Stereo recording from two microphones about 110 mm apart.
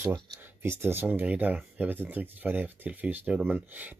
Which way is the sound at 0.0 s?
25° right (ahead or behind).